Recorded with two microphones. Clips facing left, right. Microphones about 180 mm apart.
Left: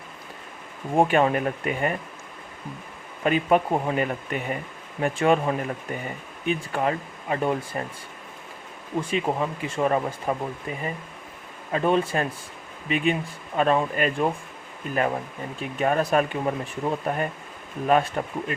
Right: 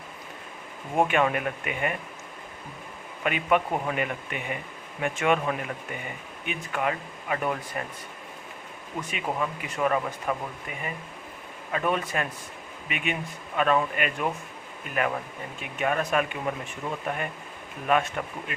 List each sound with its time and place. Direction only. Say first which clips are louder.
0.9 s speech: left 4 dB; 35° left (ahead or behind)
3.2 s speech: left 4 dB; 35° left (ahead or behind)
9.0 s speech: left 5 dB; 30° left (ahead or behind)
15.6 s speech: left 4 dB; 35° left (ahead or behind)
17.8 s speech: left 4 dB; 35° left (ahead or behind)